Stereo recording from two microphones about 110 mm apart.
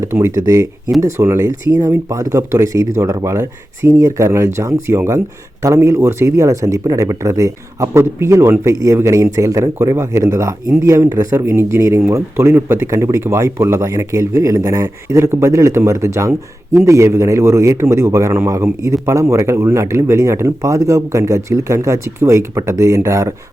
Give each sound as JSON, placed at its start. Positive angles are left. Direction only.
{"t": 0.0, "sound": "a man's voice", "side_deg": -25}